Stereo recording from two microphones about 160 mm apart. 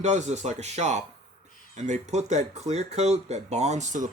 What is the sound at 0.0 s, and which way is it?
Speech, 45° right (ahead or behind).